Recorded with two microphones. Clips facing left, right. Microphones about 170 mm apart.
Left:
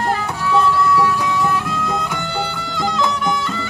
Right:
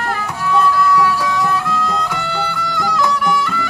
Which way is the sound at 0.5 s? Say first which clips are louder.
Right 1 dB; 25° left (ahead or behind).